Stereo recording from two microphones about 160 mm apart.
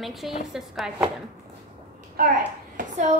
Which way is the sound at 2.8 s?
45° right (ahead or behind).